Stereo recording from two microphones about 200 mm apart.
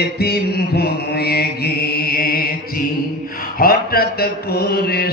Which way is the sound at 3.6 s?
50° left (ahead or behind).